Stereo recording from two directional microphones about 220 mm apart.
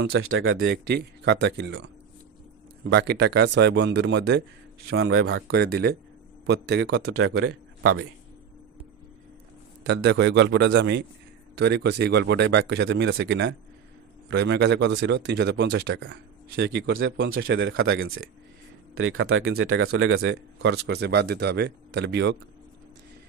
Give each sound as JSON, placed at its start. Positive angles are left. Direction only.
{"t": 0.1, "sound": "speech", "side_deg": -70}
{"t": 2.9, "sound": "speech", "side_deg": -50}
{"t": 4.9, "sound": "speech", "side_deg": -70}
{"t": 5.5, "sound": "speech", "side_deg": -45}
{"t": 7.1, "sound": "speech", "side_deg": -75}
{"t": 9.8, "sound": "speech", "side_deg": -50}
{"t": 20.5, "sound": "speech", "side_deg": -50}